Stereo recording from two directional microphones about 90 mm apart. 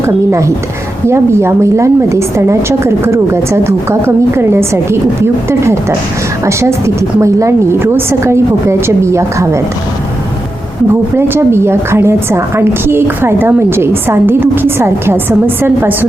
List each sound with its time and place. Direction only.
0.0 s a woman's voice: 30° right (ahead or behind)
11.2 s a woman's voice: 30° right (ahead or behind)